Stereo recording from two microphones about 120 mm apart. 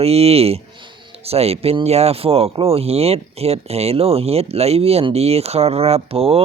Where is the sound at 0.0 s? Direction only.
55° right (ahead or behind).